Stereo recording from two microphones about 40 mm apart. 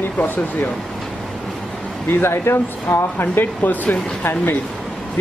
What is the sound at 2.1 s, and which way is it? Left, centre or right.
Speech, left.